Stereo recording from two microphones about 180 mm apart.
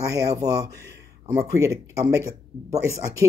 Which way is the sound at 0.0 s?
20° right (ahead or behind).